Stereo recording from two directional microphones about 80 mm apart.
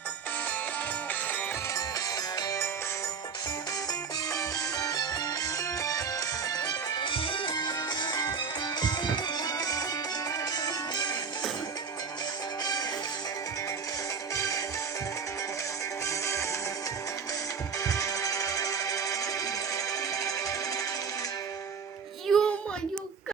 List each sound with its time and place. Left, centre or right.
4.3 s music: left
14.3 s music: left
16.0 s music: left
17.8 s music: left
22.3 s child singing: centre